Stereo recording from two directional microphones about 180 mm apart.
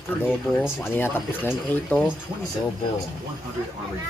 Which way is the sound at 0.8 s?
10° left (ahead or behind).